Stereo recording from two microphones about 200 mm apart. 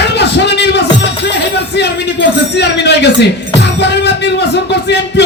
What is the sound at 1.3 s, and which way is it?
A man's voice, 60° left (ahead or behind).